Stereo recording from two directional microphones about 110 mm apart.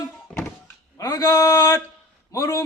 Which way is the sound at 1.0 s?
30° left (ahead or behind).